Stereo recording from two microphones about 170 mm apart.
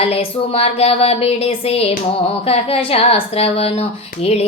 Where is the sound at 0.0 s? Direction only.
35° left (ahead or behind).